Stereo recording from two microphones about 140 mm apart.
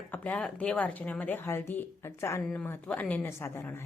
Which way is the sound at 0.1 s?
10° left (ahead or behind).